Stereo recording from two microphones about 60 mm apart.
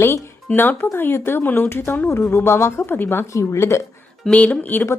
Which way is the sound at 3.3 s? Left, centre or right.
Left.